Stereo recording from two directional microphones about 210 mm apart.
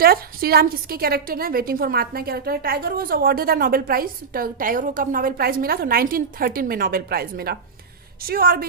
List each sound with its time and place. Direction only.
0.0 s a woman's voice: 45° right (ahead or behind)